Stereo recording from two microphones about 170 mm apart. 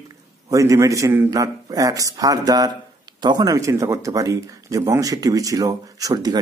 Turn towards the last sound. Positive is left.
turn(degrees=-25)  # may be behind; listen again after turning